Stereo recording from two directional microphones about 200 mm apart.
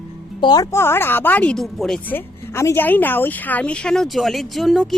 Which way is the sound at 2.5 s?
15° left (ahead or behind).